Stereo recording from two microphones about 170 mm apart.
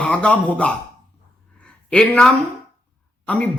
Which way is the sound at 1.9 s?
5° left (ahead or behind).